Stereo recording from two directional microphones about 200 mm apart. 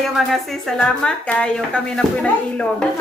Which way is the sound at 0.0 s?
Centre (ahead or behind).